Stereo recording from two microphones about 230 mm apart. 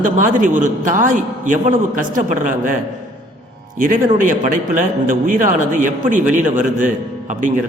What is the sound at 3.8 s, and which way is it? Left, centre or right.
A man's voice, right.